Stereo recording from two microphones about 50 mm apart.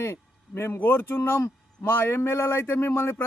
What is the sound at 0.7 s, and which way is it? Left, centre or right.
A man's voice, left.